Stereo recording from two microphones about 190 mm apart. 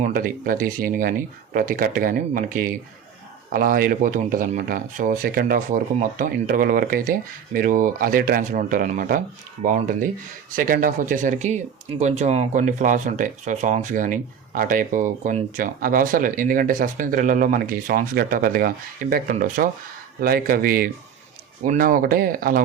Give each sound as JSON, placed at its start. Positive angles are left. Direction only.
{"t": 0.0, "sound": "speech", "side_deg": -45}